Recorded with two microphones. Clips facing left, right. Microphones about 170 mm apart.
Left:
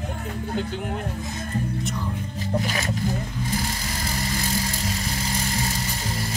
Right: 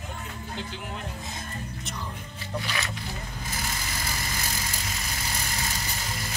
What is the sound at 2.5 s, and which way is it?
Speech, 40° left (ahead or behind).